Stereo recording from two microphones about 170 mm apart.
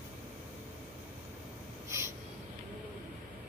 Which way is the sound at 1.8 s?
15° right (ahead or behind).